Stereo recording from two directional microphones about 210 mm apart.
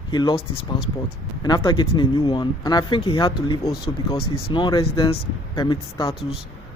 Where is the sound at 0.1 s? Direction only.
20° left (ahead or behind).